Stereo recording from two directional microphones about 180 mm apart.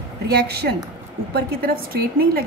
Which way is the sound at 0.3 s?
65° right (ahead or behind).